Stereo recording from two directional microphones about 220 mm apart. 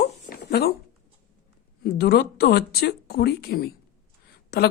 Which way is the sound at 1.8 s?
45° left (ahead or behind).